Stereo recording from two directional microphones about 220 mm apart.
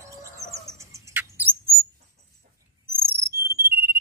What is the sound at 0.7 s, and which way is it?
Bird, 15° right (ahead or behind).